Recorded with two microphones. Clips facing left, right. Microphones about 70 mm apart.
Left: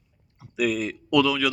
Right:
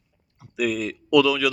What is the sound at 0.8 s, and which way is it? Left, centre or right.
Speech, left.